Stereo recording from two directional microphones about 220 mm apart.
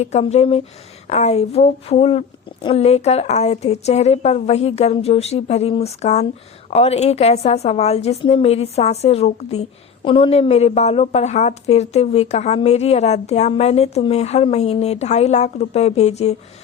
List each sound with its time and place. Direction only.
0.0 s a woman's voice: 30° left (ahead or behind)